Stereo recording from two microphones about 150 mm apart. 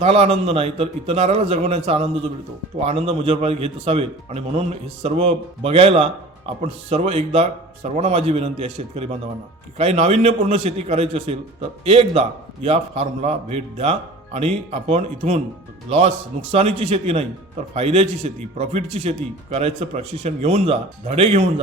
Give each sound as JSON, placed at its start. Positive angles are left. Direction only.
{"t": 0.0, "sound": "a man's voice", "side_deg": -45}